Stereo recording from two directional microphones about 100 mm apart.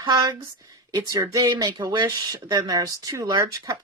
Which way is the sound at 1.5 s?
50° right (ahead or behind).